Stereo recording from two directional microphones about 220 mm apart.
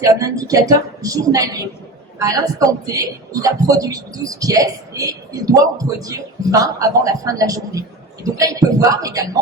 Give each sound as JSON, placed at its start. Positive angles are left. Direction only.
{"t": 0.0, "sound": "a man's voice", "side_deg": -15}